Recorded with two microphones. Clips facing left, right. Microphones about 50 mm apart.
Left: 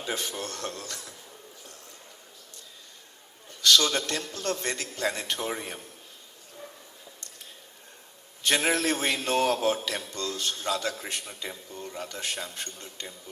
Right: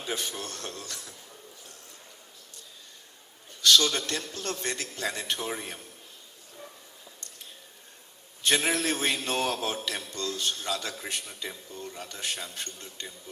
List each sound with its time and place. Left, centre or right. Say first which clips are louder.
0.0 s a man's voice: left 1 dB; left
3.8 s a man's voice: left 1 dB; left
8.4 s a man's voice: left 1 dB; left